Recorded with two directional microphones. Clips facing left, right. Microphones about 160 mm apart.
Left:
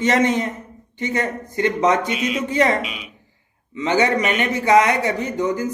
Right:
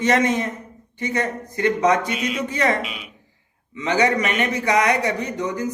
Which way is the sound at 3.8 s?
25° left (ahead or behind).